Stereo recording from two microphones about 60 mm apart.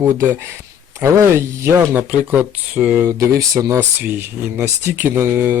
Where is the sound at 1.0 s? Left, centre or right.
Right.